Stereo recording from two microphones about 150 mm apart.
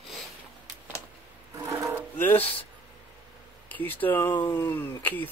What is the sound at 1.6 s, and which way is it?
Wood, 20° right (ahead or behind).